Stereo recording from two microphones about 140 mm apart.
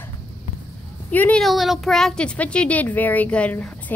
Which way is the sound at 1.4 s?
Centre (ahead or behind).